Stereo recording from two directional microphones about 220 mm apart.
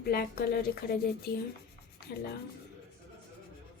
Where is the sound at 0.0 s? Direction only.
45° left (ahead or behind).